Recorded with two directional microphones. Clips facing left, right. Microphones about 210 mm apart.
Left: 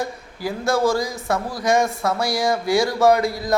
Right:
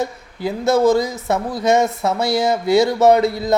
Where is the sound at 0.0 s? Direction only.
20° right (ahead or behind).